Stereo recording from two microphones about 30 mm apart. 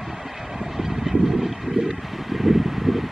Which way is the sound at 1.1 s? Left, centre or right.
Centre.